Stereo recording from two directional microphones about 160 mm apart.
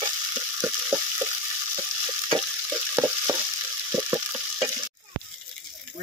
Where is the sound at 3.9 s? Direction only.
15° right (ahead or behind).